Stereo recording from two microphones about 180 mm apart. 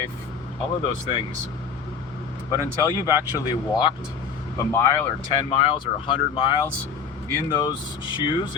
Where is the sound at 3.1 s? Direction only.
25° left (ahead or behind).